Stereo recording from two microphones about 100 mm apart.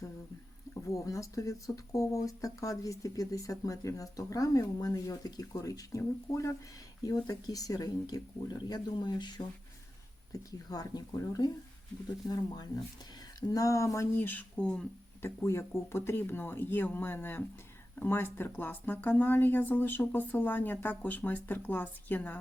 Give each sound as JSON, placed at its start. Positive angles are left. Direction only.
{"t": 0.7, "sound": "speech", "side_deg": 35}
{"t": 10.3, "sound": "speech", "side_deg": 40}
{"t": 13.5, "sound": "speech", "side_deg": 35}
{"t": 15.2, "sound": "speech", "side_deg": 25}